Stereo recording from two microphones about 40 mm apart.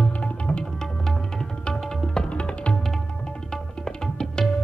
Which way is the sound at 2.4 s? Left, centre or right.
Left.